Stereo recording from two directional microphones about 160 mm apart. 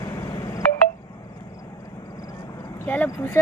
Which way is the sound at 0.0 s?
15° left (ahead or behind).